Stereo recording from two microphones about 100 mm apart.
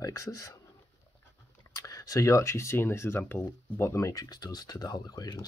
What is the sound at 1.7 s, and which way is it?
Speech, 35° left (ahead or behind).